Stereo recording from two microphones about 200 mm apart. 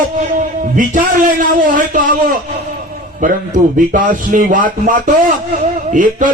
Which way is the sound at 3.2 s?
40° right (ahead or behind).